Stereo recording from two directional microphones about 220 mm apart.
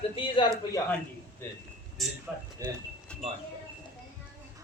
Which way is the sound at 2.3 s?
5° right (ahead or behind).